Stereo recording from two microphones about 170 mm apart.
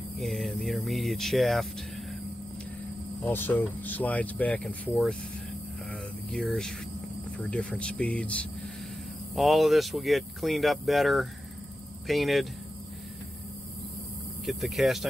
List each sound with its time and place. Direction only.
0.2 s speech: centre (ahead or behind)
3.3 s speech: 10° left (ahead or behind)
5.9 s a sound: centre (ahead or behind)
7.3 s speech: 5° left (ahead or behind)
14.4 s speech: centre (ahead or behind)